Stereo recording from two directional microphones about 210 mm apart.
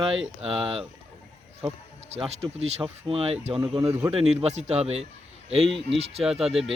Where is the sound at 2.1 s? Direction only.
30° right (ahead or behind).